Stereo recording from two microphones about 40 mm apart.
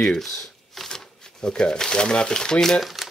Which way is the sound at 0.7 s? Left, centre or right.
Centre.